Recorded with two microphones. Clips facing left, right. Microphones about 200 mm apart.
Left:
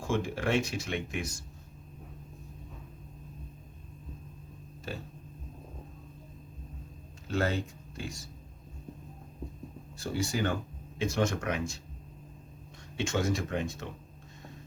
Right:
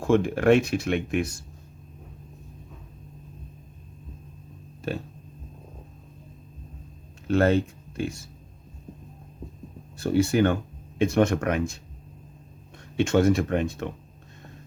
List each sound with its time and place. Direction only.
0.0 s speech: 60° right (ahead or behind)
7.3 s speech: 60° right (ahead or behind)
10.0 s speech: 60° right (ahead or behind)
13.0 s speech: 60° right (ahead or behind)